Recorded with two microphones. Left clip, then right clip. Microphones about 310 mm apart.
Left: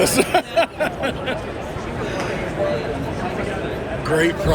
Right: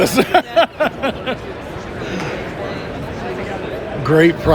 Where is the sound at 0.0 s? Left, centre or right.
Right.